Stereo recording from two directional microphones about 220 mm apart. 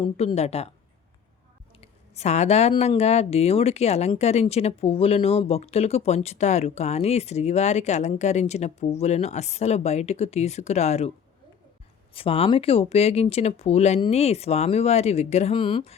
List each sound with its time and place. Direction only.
0.0 s speech: 25° left (ahead or behind)
1.8 s speech: 30° left (ahead or behind)
12.1 s speech: 25° left (ahead or behind)